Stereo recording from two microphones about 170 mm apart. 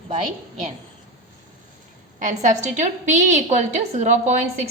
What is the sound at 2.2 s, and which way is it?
A woman's voice, 50° right (ahead or behind).